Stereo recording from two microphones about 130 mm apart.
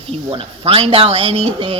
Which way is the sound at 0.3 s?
45° right (ahead or behind).